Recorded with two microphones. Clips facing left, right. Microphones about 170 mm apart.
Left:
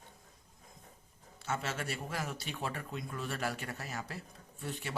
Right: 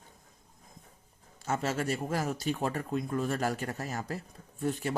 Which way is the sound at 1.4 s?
40° right (ahead or behind).